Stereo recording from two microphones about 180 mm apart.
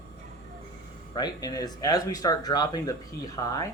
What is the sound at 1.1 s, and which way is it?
Speech, 20° left (ahead or behind).